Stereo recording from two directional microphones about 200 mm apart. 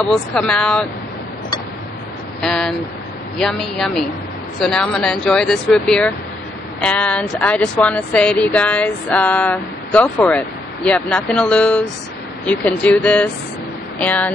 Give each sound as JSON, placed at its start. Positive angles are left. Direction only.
{"t": 0.0, "sound": "speech", "side_deg": 5}
{"t": 2.4, "sound": "speech", "side_deg": 0}